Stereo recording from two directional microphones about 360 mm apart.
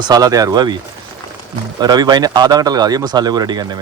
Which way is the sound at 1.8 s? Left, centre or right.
Centre.